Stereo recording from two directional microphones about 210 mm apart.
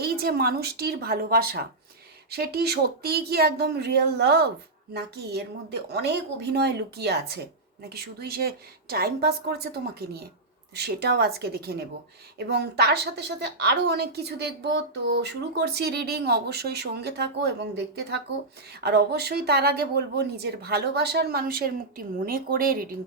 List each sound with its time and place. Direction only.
0.0 s a woman's voice: 45° right (ahead or behind)